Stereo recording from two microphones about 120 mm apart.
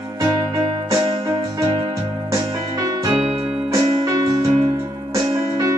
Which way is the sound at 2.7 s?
30° right (ahead or behind).